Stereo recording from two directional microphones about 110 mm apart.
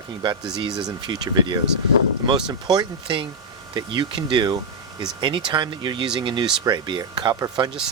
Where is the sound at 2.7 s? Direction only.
45° right (ahead or behind).